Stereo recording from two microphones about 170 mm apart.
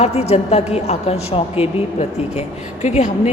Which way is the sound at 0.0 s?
40° left (ahead or behind).